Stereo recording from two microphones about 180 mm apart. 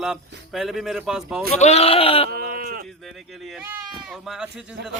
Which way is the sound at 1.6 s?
35° left (ahead or behind).